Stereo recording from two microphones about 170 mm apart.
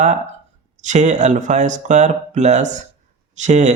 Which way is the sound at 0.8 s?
45° right (ahead or behind).